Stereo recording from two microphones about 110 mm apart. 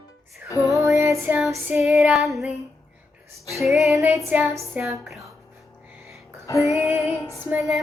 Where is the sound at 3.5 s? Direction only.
Centre (ahead or behind).